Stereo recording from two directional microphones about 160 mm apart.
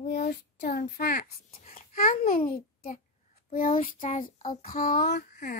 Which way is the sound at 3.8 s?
55° left (ahead or behind).